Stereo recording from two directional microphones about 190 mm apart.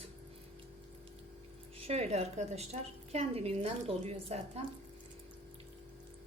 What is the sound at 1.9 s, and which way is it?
Speech, 35° right (ahead or behind).